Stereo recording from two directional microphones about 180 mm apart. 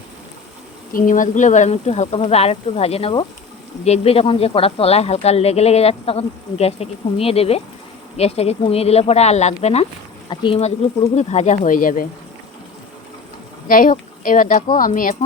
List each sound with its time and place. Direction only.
0.9 s speech: 45° left (ahead or behind); by 10.7 s 30° left (ahead or behind)
11.1 s speech: 40° left (ahead or behind)
13.7 s speech: 50° left (ahead or behind)